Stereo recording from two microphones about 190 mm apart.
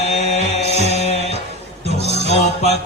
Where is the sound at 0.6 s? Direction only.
35° left (ahead or behind).